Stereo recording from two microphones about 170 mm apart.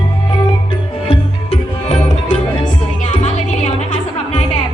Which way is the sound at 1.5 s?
40° left (ahead or behind).